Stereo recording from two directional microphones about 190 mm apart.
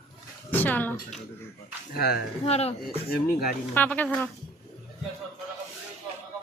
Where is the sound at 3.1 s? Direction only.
50° left (ahead or behind).